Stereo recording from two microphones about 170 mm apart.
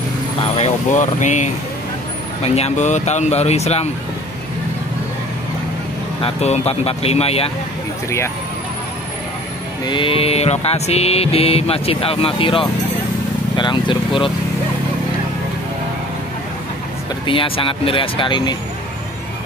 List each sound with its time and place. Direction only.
0.4 s speech: 40° left (ahead or behind)
2.4 s music: 40° left (ahead or behind)
6.2 s music: 40° left (ahead or behind)
9.8 s music: 30° left (ahead or behind)
13.6 s speech: 30° left (ahead or behind)
17.3 s music: 30° left (ahead or behind)